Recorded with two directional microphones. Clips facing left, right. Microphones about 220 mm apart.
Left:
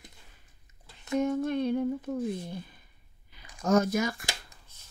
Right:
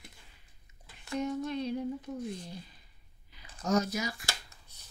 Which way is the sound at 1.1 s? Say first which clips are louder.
Left 6 dB; 55° left (ahead or behind).